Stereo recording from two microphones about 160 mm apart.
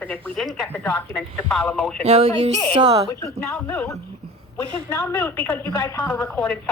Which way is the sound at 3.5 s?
10° left (ahead or behind).